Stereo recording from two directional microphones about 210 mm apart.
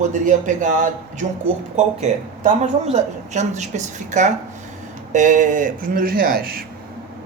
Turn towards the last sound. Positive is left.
turn(degrees=-45)  # may be behind; listen again after turning